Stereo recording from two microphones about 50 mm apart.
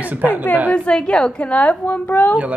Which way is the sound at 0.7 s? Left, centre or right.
Left.